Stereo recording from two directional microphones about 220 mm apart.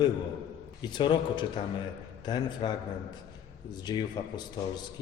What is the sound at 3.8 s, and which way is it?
Speech, 20° left (ahead or behind).